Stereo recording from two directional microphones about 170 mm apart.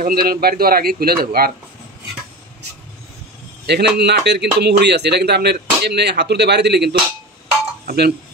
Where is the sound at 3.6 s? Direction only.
75° right (ahead or behind).